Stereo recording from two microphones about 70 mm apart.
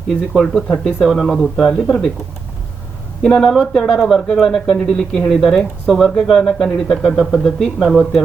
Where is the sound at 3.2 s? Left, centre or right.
Centre.